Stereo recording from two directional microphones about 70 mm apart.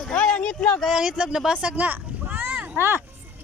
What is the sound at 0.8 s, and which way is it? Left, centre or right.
Speech, centre.